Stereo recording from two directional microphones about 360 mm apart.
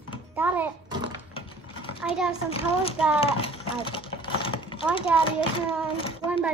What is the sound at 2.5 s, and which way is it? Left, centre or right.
A child's voice, centre.